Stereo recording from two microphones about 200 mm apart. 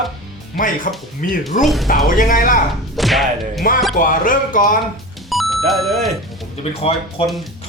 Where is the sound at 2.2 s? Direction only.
45° left (ahead or behind).